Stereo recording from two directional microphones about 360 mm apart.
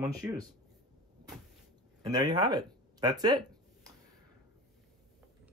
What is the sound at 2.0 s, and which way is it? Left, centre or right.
Speech, centre.